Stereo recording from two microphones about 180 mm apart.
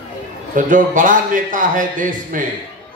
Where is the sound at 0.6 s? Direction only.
50° right (ahead or behind).